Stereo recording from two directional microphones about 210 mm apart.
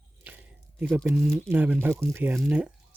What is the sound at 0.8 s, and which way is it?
Speech, centre (ahead or behind).